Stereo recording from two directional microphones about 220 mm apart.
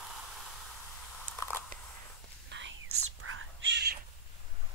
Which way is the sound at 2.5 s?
65° right (ahead or behind).